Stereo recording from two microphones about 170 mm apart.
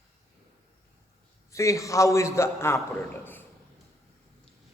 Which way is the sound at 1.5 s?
20° left (ahead or behind).